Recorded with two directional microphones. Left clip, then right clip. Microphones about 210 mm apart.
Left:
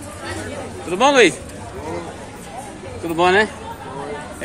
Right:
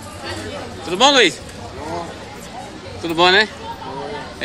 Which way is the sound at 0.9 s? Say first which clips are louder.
Even; centre (ahead or behind).